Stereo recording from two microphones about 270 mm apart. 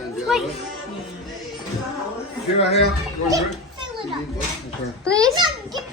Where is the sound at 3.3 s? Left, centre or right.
Centre.